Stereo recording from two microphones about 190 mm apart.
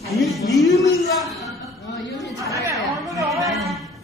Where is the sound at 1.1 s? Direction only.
Centre (ahead or behind).